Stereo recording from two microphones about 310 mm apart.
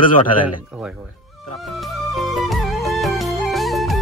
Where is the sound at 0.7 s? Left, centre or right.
Centre.